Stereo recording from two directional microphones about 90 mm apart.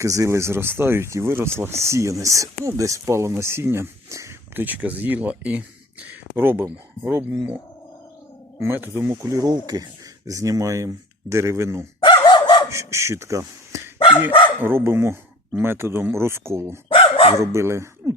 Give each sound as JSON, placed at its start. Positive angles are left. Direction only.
{"t": 0.0, "sound": "speech", "side_deg": -35}
{"t": 4.5, "sound": "speech", "side_deg": -20}
{"t": 8.6, "sound": "speech", "side_deg": -25}
{"t": 11.9, "sound": "dog", "side_deg": 55}
{"t": 12.7, "sound": "speech", "side_deg": -35}
{"t": 14.3, "sound": "speech", "side_deg": 65}
{"t": 14.6, "sound": "speech", "side_deg": -25}
{"t": 16.9, "sound": "dog", "side_deg": 90}
{"t": 17.4, "sound": "speech", "side_deg": -30}